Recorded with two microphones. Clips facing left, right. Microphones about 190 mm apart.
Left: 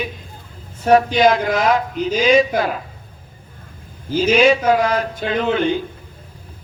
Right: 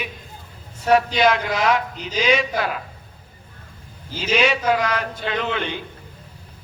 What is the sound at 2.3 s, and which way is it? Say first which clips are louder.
Speech: left 6 dB; 40° left (ahead or behind).